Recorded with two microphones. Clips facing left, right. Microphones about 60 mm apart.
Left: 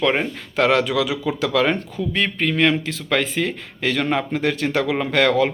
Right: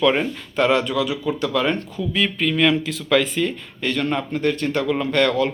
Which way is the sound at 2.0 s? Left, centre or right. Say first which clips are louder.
Even; left.